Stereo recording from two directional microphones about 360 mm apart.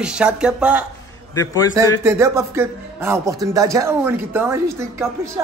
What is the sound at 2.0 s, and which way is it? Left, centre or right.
A man's voice, centre.